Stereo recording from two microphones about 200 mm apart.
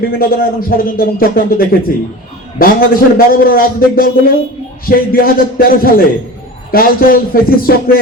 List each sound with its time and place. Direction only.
0.0 s speech: 50° left (ahead or behind)